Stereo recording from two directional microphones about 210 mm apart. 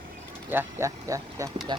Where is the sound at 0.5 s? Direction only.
15° right (ahead or behind).